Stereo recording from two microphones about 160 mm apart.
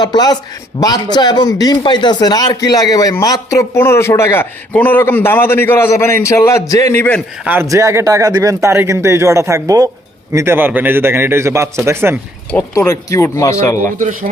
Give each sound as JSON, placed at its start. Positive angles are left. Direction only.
{"t": 0.0, "sound": "speech", "side_deg": 25}
{"t": 7.4, "sound": "speech", "side_deg": -15}
{"t": 12.5, "sound": "speech", "side_deg": 15}
{"t": 14.0, "sound": "speech", "side_deg": -55}